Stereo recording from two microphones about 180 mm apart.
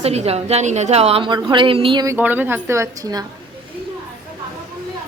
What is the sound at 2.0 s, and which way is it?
A woman's voice, 10° right (ahead or behind).